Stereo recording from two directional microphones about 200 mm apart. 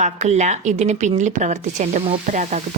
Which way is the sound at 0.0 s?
35° right (ahead or behind).